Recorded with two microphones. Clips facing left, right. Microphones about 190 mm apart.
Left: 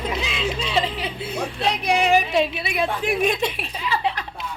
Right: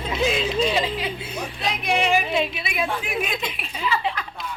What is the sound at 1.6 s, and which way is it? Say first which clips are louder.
A woman's voice: left 2 dB; 35° left (ahead or behind).